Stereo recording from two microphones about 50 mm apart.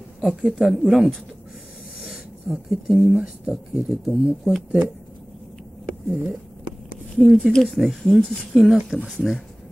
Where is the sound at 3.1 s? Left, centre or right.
Centre.